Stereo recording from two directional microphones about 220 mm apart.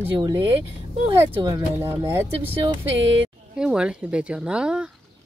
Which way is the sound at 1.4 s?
15° right (ahead or behind).